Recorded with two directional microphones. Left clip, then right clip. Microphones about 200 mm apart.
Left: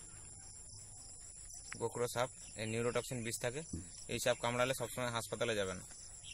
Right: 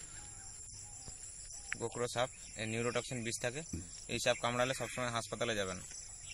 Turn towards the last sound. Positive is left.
turn(degrees=25)  # may be behind; listen again after turning